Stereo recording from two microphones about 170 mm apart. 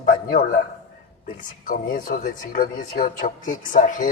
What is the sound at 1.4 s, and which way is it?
Speech, 55° left (ahead or behind).